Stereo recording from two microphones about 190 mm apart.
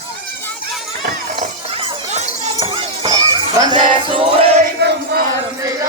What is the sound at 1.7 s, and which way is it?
Shatter, 35° right (ahead or behind).